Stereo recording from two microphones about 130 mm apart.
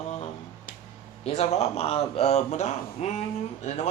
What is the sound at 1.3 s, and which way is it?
Speech, 55° left (ahead or behind).